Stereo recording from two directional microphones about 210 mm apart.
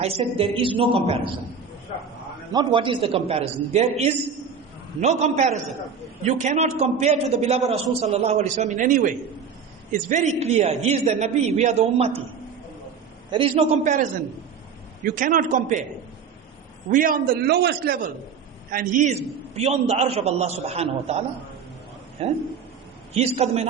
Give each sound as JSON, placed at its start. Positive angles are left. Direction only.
{"t": 0.2, "sound": "a man's voice", "side_deg": -25}
{"t": 2.5, "sound": "a man's voice", "side_deg": -20}
{"t": 13.3, "sound": "a man's voice", "side_deg": -25}
{"t": 13.8, "sound": "a man's voice", "side_deg": -40}
{"t": 16.9, "sound": "a man's voice", "side_deg": -40}